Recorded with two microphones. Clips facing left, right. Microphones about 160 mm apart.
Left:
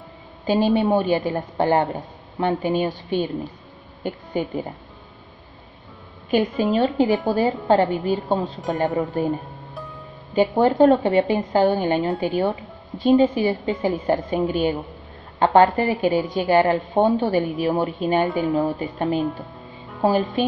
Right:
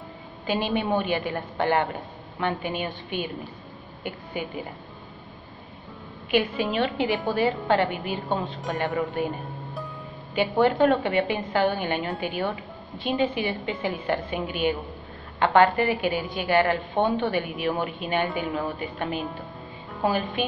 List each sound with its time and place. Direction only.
0.5 s a woman's voice: 40° left (ahead or behind)
4.0 s a woman's voice: 40° left (ahead or behind)
6.3 s a woman's voice: 40° left (ahead or behind)
10.3 s a woman's voice: 40° left (ahead or behind)